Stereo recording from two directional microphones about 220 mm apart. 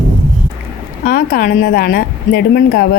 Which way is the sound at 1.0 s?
45° left (ahead or behind).